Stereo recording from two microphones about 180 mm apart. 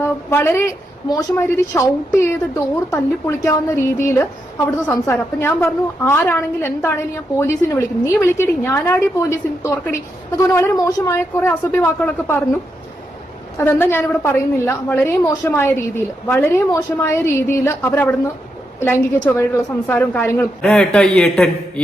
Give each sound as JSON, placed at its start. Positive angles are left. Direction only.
{"t": 0.0, "sound": "a woman's voice", "side_deg": 10}
{"t": 2.9, "sound": "a woman's voice", "side_deg": 15}
{"t": 13.6, "sound": "a woman's voice", "side_deg": 10}